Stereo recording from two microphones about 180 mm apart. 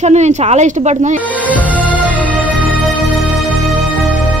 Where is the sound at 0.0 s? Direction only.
40° right (ahead or behind).